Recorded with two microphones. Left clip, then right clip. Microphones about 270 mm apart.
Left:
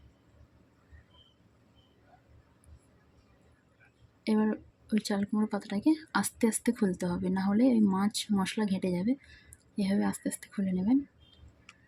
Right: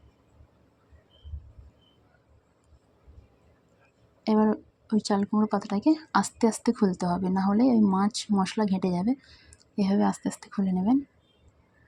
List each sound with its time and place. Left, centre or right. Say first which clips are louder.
4.2 s speech: right 6 dB; centre